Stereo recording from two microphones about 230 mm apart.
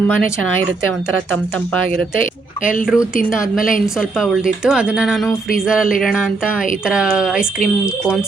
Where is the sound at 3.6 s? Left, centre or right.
Left.